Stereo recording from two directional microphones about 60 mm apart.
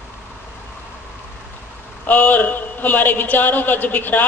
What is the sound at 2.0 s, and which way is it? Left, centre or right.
A man's voice, left.